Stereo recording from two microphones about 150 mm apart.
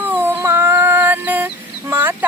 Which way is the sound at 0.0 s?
15° right (ahead or behind).